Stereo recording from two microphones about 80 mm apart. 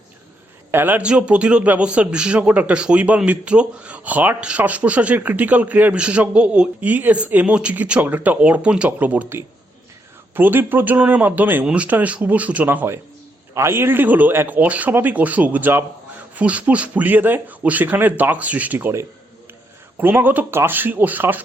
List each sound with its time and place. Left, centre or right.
0.7 s a man's voice: right
1.0 s a man's voice: centre
20.0 s a man's voice: right